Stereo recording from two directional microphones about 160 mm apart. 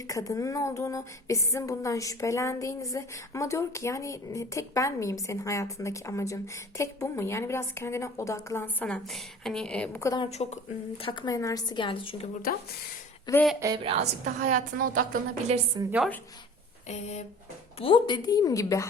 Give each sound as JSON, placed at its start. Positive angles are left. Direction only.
{"t": 0.1, "sound": "speech", "side_deg": 20}
{"t": 10.2, "sound": "speech", "side_deg": 40}
{"t": 11.3, "sound": "speech", "side_deg": 20}
{"t": 13.3, "sound": "speech", "side_deg": 25}
{"t": 13.7, "sound": "a woman's voice", "side_deg": -40}
{"t": 15.8, "sound": "a woman's voice", "side_deg": -25}
{"t": 16.9, "sound": "speech", "side_deg": 45}
{"t": 17.7, "sound": "speech", "side_deg": 30}